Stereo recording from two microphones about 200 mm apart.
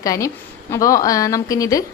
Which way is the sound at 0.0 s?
15° left (ahead or behind).